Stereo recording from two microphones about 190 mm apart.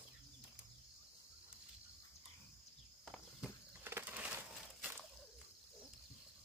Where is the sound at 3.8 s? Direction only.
10° right (ahead or behind).